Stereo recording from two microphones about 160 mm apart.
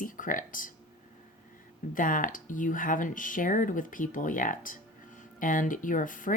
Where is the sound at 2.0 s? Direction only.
55° left (ahead or behind).